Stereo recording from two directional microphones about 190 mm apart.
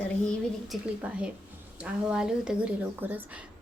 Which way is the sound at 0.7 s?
5° right (ahead or behind).